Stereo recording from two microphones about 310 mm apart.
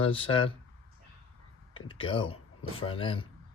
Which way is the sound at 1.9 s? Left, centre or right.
Centre.